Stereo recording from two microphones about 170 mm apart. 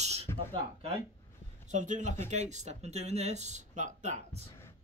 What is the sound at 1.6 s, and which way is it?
Speech, 45° right (ahead or behind).